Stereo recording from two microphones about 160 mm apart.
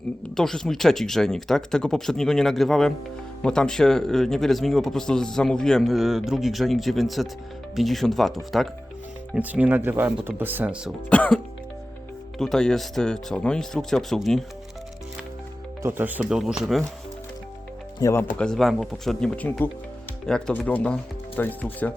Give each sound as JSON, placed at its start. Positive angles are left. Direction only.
{"t": 0.3, "sound": "speech", "side_deg": 5}
{"t": 9.3, "sound": "speech", "side_deg": -10}
{"t": 11.1, "sound": "speech", "side_deg": 10}
{"t": 12.4, "sound": "speech", "side_deg": 5}
{"t": 15.8, "sound": "speech", "side_deg": -15}
{"t": 18.0, "sound": "speech", "side_deg": 15}
{"t": 18.3, "sound": "speech", "side_deg": 5}